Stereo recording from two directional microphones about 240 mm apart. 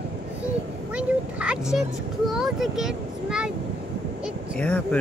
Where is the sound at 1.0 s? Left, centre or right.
Centre.